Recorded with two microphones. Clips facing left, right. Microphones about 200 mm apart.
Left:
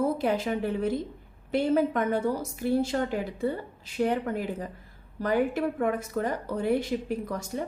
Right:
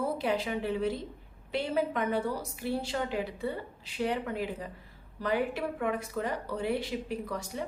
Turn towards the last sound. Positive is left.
turn(degrees=45)  # may be behind; listen again after turning